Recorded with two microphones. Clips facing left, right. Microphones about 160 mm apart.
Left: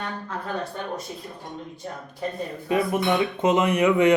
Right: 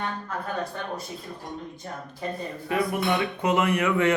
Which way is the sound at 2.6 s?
20° left (ahead or behind).